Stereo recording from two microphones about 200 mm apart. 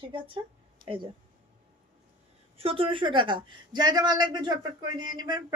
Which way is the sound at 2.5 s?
30° right (ahead or behind).